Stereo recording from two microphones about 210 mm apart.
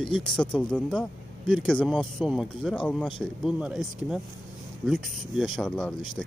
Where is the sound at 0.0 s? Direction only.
5° left (ahead or behind).